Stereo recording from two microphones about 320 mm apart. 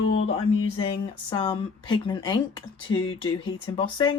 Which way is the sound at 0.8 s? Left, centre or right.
Centre.